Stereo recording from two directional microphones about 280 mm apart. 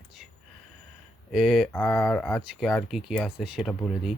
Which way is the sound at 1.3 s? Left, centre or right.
Centre.